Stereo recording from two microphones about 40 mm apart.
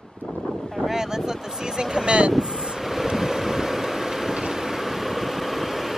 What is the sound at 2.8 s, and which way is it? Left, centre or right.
Vehicle, centre.